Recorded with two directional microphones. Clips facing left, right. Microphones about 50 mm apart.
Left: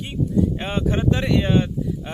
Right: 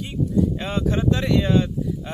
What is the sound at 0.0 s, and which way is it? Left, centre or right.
Speech, left.